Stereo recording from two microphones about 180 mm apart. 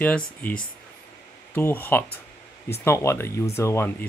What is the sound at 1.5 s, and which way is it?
Speech, 10° left (ahead or behind).